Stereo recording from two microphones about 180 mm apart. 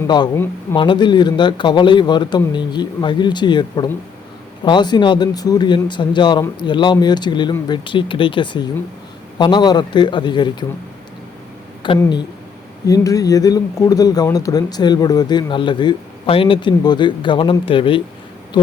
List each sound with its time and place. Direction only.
0.8 s speech: 25° left (ahead or behind)
11.8 s speech: 25° left (ahead or behind)